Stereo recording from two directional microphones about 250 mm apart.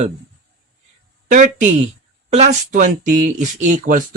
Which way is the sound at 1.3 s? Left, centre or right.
Right.